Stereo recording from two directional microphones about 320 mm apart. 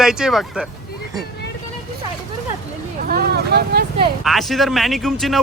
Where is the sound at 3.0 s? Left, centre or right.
Right.